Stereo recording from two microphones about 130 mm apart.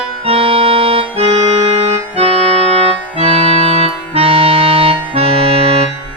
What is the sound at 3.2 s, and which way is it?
Music, 50° right (ahead or behind).